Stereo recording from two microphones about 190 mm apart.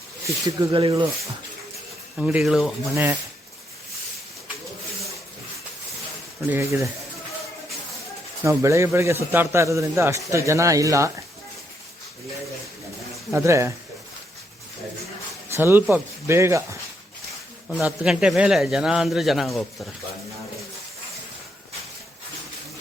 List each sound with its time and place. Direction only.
0.3 s speech: 20° right (ahead or behind)
2.1 s a man's voice: 5° right (ahead or behind)
6.5 s a man's voice: 15° right (ahead or behind)
8.4 s a man's voice: 15° right (ahead or behind)
13.3 s a man's voice: 15° right (ahead or behind)
15.4 s a man's voice: 15° right (ahead or behind)
17.7 s a man's voice: 5° right (ahead or behind)